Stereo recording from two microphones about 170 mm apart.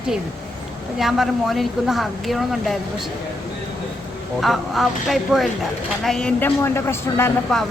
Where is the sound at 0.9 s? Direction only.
Centre (ahead or behind).